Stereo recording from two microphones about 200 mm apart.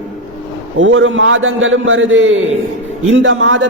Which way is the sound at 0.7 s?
75° right (ahead or behind).